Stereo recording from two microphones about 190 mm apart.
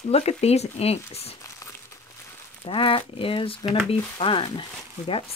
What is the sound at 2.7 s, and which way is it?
Speech, 30° left (ahead or behind).